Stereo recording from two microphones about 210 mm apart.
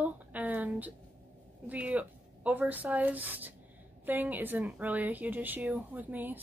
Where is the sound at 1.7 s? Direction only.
5° right (ahead or behind).